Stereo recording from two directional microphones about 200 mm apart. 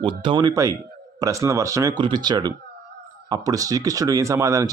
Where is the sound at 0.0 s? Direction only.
25° right (ahead or behind).